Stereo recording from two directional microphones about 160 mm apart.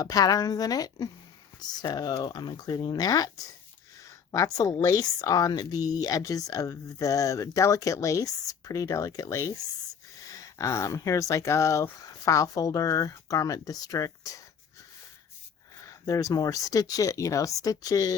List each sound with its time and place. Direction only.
0.0 s speech: 25° left (ahead or behind)
15.8 s speech: 20° left (ahead or behind)